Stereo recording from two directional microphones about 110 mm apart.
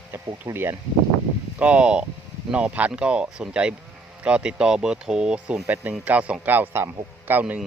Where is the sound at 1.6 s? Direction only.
10° right (ahead or behind).